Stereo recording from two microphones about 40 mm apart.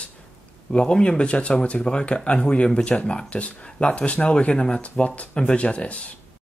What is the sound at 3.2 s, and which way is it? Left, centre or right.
Speech, left.